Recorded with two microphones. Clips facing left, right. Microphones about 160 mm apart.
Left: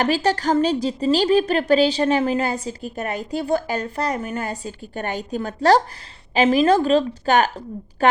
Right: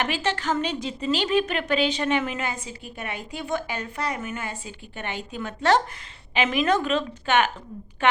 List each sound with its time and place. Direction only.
0.0 s a woman's voice: 35° left (ahead or behind)